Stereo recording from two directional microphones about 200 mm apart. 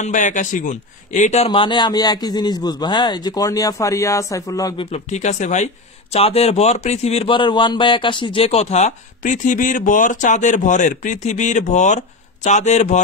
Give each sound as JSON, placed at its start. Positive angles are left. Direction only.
{"t": 0.0, "sound": "a man's voice", "side_deg": 40}
{"t": 4.9, "sound": "speech", "side_deg": 35}